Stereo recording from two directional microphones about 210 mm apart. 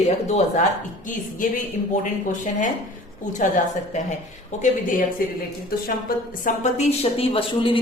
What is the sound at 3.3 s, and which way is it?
Speech, 35° left (ahead or behind).